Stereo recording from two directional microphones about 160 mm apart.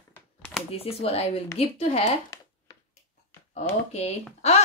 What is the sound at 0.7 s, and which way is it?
Speech, 40° left (ahead or behind).